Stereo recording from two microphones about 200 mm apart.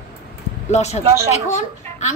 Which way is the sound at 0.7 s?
35° left (ahead or behind).